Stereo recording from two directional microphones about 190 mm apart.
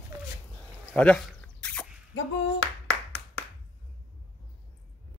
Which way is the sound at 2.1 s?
90° left.